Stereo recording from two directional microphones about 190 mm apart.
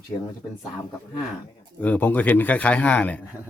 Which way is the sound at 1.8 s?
10° left (ahead or behind).